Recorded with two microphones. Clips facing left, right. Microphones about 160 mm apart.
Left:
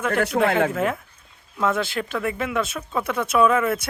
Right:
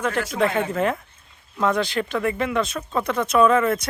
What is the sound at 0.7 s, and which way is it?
Speech, 5° left (ahead or behind).